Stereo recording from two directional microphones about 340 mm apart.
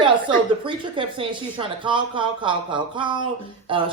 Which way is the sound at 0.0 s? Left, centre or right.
Centre.